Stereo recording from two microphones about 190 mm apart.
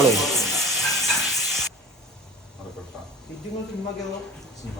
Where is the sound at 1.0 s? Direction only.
Centre (ahead or behind).